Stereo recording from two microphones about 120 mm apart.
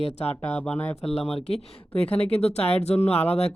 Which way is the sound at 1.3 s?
60° left (ahead or behind).